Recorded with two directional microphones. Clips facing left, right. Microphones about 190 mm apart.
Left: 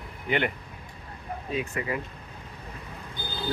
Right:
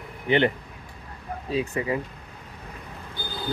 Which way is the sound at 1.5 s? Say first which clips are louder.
Right 5 dB; 30° right (ahead or behind).